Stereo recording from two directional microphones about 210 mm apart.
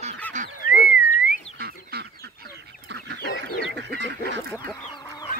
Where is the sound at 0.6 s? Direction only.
40° left (ahead or behind).